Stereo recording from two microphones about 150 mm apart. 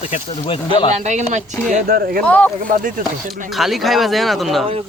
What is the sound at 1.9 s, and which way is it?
Speech, 80° right.